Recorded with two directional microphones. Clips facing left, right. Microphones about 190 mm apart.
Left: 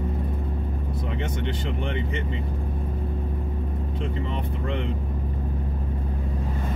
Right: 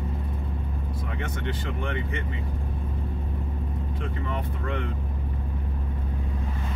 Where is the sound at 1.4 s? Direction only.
20° left (ahead or behind).